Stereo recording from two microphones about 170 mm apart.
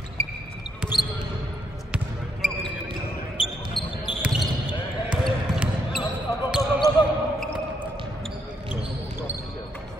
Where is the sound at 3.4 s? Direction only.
30° left (ahead or behind).